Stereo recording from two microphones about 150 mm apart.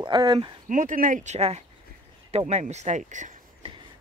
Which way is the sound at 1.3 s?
45° right (ahead or behind).